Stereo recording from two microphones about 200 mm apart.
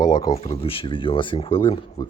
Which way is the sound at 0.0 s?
20° left (ahead or behind).